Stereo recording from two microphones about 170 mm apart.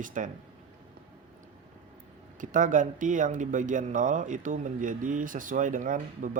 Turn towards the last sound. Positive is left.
turn(degrees=-50)  # may be behind; listen again after turning